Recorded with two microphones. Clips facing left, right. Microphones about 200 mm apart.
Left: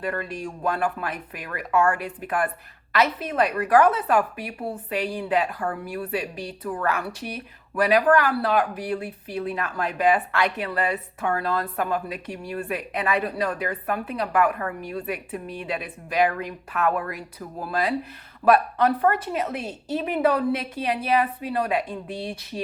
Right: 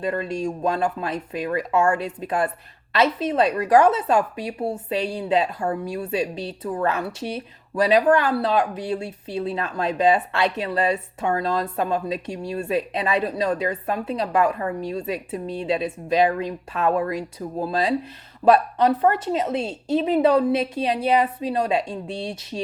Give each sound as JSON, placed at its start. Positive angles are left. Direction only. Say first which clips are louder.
{"t": 0.0, "sound": "a woman's voice", "louder": "right 5 dB", "side_deg": -25}